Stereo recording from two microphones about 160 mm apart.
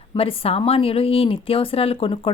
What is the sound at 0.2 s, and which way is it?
A woman's voice, 35° left (ahead or behind).